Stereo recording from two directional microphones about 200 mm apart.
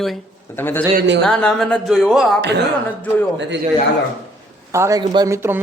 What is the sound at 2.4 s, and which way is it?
Speech, 60° right (ahead or behind).